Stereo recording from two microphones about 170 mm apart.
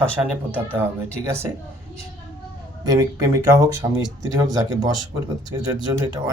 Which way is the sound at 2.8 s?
20° right (ahead or behind).